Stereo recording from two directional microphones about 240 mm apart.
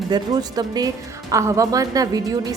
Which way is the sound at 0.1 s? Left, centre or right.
Centre.